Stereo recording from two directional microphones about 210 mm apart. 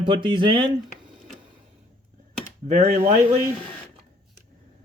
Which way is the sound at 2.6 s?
30° right (ahead or behind).